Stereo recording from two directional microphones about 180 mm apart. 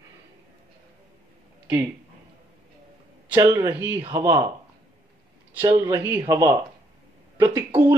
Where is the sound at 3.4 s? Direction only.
20° right (ahead or behind).